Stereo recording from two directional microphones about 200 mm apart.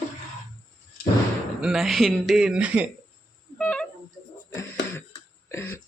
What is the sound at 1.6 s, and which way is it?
A man's voice, centre (ahead or behind).